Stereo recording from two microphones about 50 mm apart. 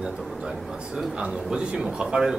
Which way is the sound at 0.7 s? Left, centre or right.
Centre.